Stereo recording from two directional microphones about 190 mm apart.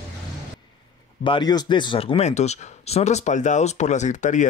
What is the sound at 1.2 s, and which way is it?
Speech, 25° left (ahead or behind).